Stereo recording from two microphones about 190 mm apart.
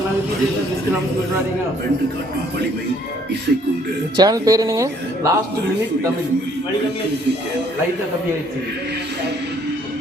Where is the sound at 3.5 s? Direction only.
55° right (ahead or behind).